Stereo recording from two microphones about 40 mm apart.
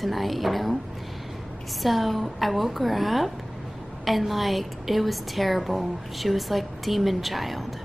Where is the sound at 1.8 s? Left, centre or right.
Centre.